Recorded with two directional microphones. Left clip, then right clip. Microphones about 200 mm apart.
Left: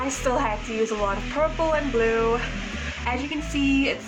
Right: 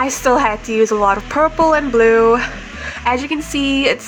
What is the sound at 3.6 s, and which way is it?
Speech, 60° right (ahead or behind).